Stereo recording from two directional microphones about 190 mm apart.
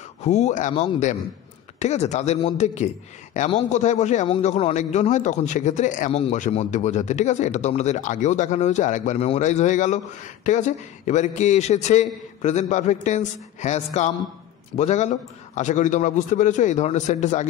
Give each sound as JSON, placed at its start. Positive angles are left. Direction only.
{"t": 0.2, "sound": "a man's voice", "side_deg": 35}